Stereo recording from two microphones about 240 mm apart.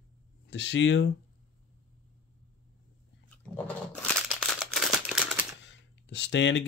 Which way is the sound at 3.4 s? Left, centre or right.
Centre.